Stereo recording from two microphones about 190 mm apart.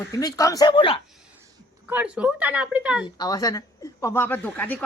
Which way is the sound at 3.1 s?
20° left (ahead or behind).